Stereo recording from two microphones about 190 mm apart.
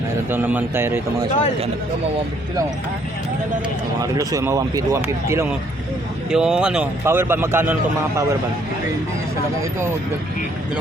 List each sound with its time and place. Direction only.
0.3 s speech: 10° right (ahead or behind)
4.0 s speech: 20° right (ahead or behind)
6.3 s speech: 5° right (ahead or behind)